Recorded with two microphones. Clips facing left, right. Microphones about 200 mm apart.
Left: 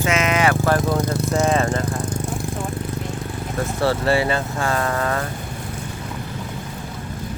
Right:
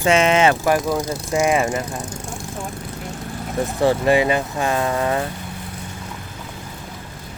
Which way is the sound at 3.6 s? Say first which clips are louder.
Right 3 dB; 15° right (ahead or behind).